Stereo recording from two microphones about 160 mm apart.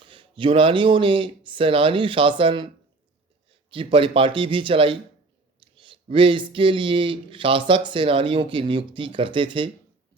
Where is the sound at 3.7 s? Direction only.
35° right (ahead or behind).